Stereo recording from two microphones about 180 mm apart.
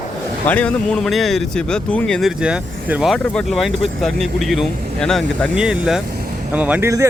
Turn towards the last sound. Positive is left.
turn(degrees=-15)  # may be behind; listen again after turning